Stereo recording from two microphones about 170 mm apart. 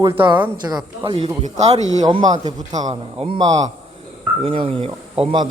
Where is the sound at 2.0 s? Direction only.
25° right (ahead or behind).